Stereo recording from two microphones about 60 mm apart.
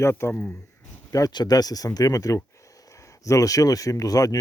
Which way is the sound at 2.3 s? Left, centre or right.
Left.